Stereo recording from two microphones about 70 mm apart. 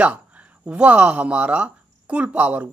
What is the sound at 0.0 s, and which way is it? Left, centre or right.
Speech, centre.